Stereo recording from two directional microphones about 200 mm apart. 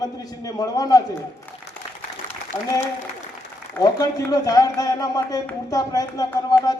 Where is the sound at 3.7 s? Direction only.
15° left (ahead or behind).